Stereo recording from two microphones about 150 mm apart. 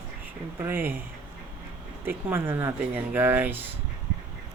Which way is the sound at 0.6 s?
15° right (ahead or behind).